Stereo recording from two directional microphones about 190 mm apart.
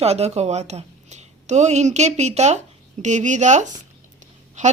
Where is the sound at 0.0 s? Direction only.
35° right (ahead or behind).